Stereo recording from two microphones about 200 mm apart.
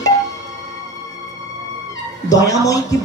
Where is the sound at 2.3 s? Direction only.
15° left (ahead or behind).